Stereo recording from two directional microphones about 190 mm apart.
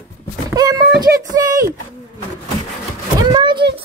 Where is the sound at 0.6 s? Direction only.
20° right (ahead or behind).